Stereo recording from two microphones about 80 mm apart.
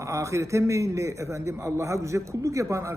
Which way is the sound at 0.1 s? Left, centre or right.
Right.